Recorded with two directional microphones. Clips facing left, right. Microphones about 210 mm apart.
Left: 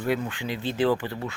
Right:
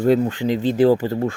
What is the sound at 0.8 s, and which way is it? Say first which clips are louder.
Speech: right 7 dB; 45° right (ahead or behind).